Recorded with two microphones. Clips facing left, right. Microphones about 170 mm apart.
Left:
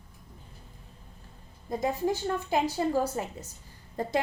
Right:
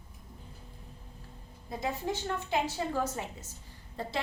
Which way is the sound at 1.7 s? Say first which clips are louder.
Left 6 dB; 40° left (ahead or behind).